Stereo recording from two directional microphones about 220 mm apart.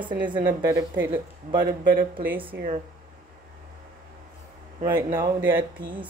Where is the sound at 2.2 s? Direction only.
10° right (ahead or behind).